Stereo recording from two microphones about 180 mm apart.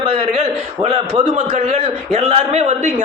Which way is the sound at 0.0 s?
30° right (ahead or behind).